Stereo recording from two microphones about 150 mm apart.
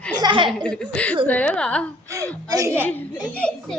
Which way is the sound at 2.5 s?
20° right (ahead or behind).